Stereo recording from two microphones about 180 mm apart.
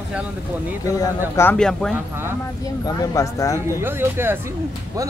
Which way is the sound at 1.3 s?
10° left (ahead or behind).